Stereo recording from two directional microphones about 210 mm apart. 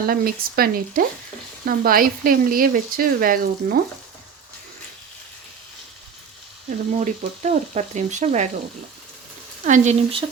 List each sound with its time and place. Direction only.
0.1 s speech: 45° right (ahead or behind)
7.0 s frying: 35° right (ahead or behind)
9.6 s frying: 35° right (ahead or behind)